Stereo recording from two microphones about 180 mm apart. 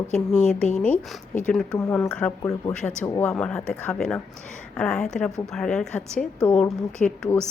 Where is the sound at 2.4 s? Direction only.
20° left (ahead or behind).